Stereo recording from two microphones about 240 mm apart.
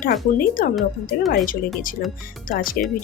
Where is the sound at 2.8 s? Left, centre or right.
Left.